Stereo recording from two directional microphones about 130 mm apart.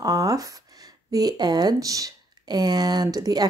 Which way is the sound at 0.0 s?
25° right (ahead or behind).